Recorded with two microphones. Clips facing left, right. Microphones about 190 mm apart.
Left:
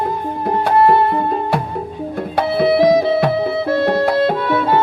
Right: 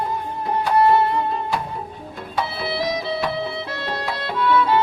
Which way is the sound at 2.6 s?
55° left (ahead or behind).